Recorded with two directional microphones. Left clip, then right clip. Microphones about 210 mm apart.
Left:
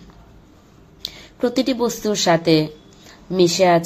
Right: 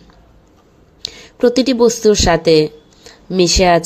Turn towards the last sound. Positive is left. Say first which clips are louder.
# right 3 dB
turn(degrees=-35)  # may be behind; listen again after turning